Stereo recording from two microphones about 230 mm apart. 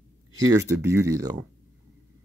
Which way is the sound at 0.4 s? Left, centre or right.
Centre.